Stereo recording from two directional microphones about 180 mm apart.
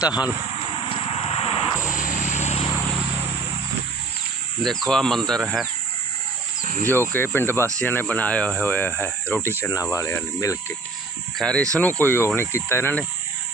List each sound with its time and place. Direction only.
0.9 s vehicle: 30° left (ahead or behind)
1.9 s vehicle: 45° left (ahead or behind)
4.6 s speech: centre (ahead or behind)
6.9 s speech: 10° left (ahead or behind)
11.3 s speech: 5° left (ahead or behind)